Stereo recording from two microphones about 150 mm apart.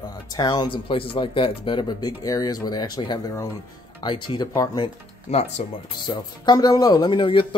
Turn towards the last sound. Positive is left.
turn(degrees=35)  # may be behind; listen again after turning